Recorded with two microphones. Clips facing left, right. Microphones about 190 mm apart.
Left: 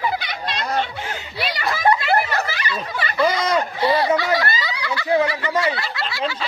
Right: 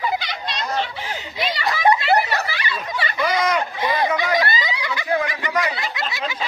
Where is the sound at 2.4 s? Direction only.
45° left (ahead or behind).